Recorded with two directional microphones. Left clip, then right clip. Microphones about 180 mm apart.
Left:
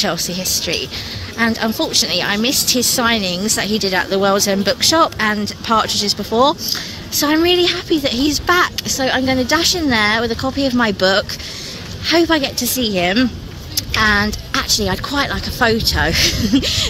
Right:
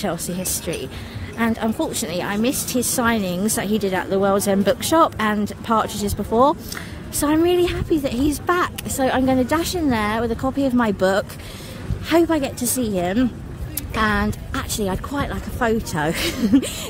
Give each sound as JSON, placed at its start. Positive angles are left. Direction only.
{"t": 0.4, "sound": "a woman's voice", "side_deg": -15}
{"t": 4.4, "sound": "a woman's voice", "side_deg": -20}